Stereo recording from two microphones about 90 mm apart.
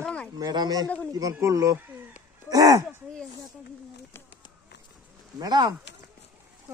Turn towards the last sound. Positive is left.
turn(degrees=-50)  # may be behind; listen again after turning